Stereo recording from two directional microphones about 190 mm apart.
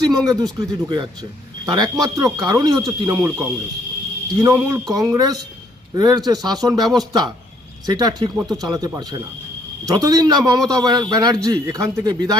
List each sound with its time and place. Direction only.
0.3 s a man's voice: 20° right (ahead or behind)
3.2 s speech: 5° right (ahead or behind)
4.4 s a man's voice: 15° right (ahead or behind)